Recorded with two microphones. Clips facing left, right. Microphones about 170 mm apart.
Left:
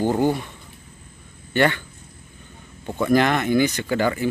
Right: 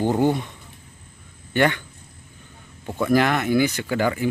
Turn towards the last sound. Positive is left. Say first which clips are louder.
# left 1 dB
turn(degrees=-10)  # may be behind; listen again after turning